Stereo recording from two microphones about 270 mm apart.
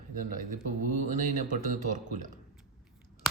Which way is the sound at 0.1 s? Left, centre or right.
Right.